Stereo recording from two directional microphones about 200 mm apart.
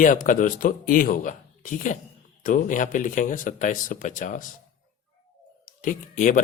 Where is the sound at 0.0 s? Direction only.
40° left (ahead or behind).